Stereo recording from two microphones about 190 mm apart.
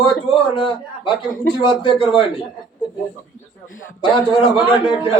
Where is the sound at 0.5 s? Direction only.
25° left (ahead or behind).